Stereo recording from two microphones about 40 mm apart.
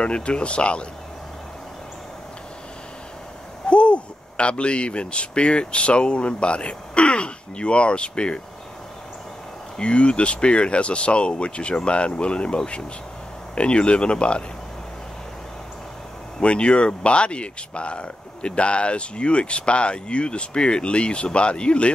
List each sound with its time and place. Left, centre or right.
0.0 s speech: left
3.6 s speech: left
9.8 s speech: left
16.3 s speech: left